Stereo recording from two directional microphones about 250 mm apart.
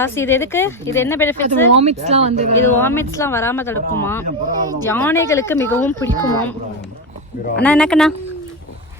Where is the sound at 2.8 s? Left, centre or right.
Centre.